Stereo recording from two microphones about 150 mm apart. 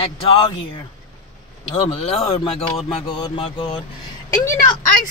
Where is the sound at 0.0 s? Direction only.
35° left (ahead or behind).